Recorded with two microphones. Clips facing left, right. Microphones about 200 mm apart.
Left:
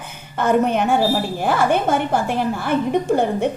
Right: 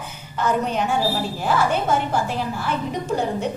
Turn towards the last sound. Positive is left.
turn(degrees=55)  # may be behind; listen again after turning